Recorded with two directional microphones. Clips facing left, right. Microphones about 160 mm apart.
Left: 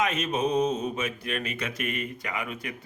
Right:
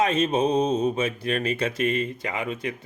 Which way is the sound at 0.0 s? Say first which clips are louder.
Right 5 dB; 30° right (ahead or behind).